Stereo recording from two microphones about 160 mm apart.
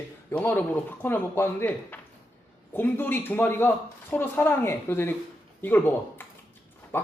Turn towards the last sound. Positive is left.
turn(degrees=15)  # may be behind; listen again after turning